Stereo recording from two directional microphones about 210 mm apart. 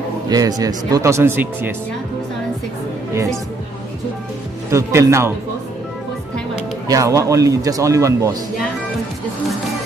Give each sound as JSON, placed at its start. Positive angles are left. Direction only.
{"t": 0.3, "sound": "speech", "side_deg": -15}
{"t": 4.6, "sound": "speech", "side_deg": -15}
{"t": 6.9, "sound": "speech", "side_deg": -15}